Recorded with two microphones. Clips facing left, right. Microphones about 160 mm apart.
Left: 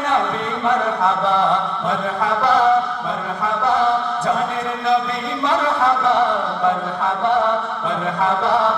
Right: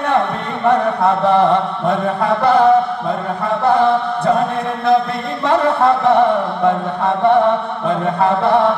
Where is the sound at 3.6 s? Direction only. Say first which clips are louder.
Right 4 dB; 55° right (ahead or behind).